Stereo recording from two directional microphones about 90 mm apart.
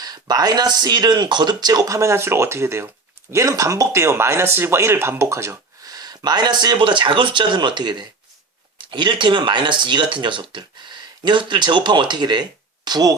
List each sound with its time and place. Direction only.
0.0 s speech: 45° right (ahead or behind)
6.7 s speech: 70° right (ahead or behind); by 13.1 s 45° right (ahead or behind)